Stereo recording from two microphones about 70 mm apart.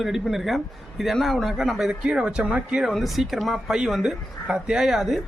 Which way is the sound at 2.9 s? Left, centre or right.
Centre.